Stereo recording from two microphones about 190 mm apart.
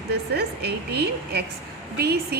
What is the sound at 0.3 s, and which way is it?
A woman's voice, 60° right (ahead or behind).